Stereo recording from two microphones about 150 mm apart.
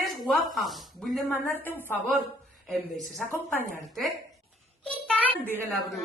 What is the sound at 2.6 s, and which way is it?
Speech, centre (ahead or behind).